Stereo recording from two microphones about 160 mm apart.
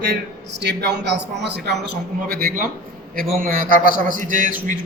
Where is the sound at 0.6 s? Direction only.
90° right.